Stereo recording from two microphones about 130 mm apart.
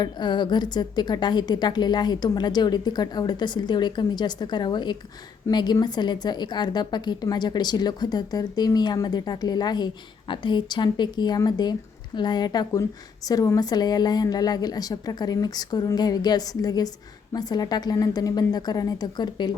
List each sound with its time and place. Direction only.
0.0 s a woman's voice: 35° left (ahead or behind)